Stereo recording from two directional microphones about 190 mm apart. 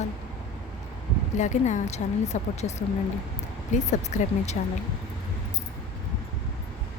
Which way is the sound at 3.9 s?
40° left (ahead or behind).